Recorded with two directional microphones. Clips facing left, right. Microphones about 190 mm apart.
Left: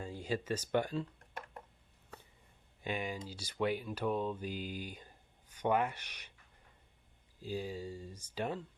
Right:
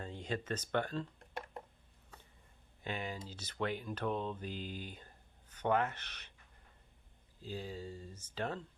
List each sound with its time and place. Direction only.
0.0 s speech: 10° left (ahead or behind)
2.8 s speech: 15° left (ahead or behind)
7.4 s speech: 10° left (ahead or behind)